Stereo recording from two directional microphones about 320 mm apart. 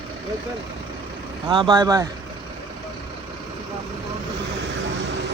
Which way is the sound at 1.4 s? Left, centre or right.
Centre.